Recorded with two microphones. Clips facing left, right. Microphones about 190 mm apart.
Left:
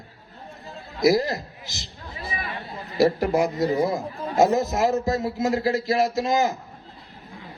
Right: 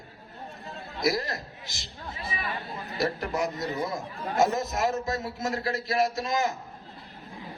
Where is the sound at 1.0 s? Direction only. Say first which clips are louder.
Left 8 dB; 25° left (ahead or behind).